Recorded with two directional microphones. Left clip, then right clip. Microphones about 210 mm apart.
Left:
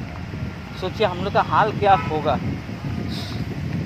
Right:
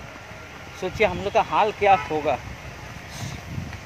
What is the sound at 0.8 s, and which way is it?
Speech, 5° left (ahead or behind).